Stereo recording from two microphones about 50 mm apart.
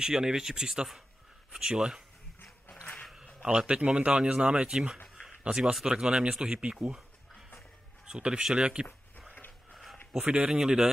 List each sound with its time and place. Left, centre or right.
0.0 s speech: centre
3.4 s speech: right
8.0 s speech: centre
10.1 s speech: right